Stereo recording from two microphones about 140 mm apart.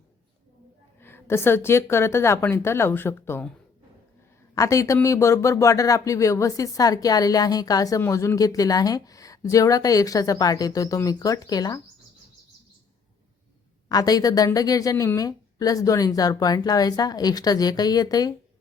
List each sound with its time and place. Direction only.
1.0 s a woman's voice: 15° left (ahead or behind)
4.5 s speech: 25° left (ahead or behind)
13.8 s speech: 25° left (ahead or behind)